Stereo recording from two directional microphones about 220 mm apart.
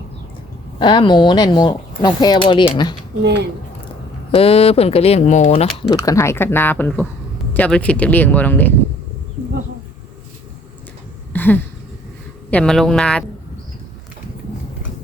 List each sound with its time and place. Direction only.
0.8 s speech: 20° left (ahead or behind)
3.2 s speech: 50° right (ahead or behind)
4.4 s speech: 25° left (ahead or behind)
5.9 s speech: 15° left (ahead or behind)
11.3 s a sound: 10° left (ahead or behind)
12.5 s speech: 5° left (ahead or behind)